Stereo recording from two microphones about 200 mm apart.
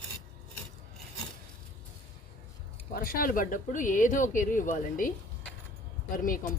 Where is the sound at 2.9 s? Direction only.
45° left (ahead or behind).